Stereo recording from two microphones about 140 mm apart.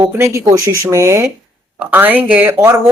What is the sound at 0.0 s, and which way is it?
Speech, 20° right (ahead or behind).